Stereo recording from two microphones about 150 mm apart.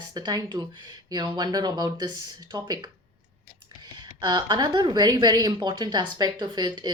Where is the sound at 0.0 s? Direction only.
25° right (ahead or behind).